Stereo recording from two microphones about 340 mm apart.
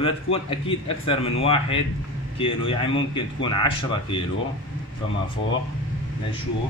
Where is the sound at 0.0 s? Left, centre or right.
Centre.